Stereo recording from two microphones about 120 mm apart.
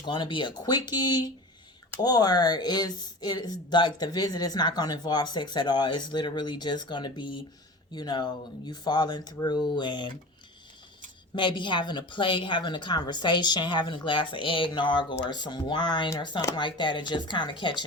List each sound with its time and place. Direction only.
0.0 s speech: 40° left (ahead or behind)
11.3 s speech: 40° left (ahead or behind)